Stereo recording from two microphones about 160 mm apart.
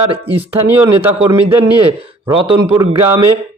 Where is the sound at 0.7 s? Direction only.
15° right (ahead or behind).